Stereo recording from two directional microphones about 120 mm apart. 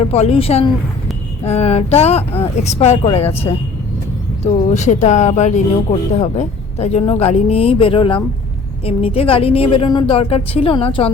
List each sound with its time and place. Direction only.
0.0 s speech: 60° left (ahead or behind)
4.7 s speech: 80° left
6.1 s speech: 60° left (ahead or behind)
7.0 s speech: 55° left (ahead or behind)